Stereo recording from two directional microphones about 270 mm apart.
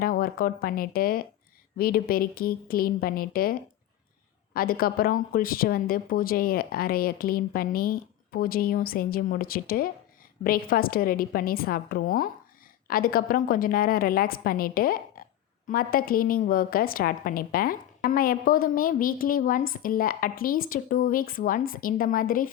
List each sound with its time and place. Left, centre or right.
0.0 s a woman's voice: left